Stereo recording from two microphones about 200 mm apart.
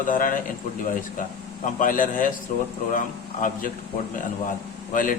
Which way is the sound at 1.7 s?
40° left (ahead or behind).